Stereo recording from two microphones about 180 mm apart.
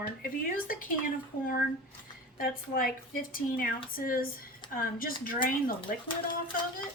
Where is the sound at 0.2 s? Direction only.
50° left (ahead or behind).